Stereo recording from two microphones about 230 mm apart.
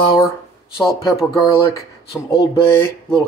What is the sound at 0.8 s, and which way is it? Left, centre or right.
Speech, centre.